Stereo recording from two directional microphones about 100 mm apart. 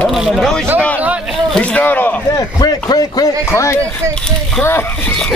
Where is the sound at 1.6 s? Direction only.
15° left (ahead or behind).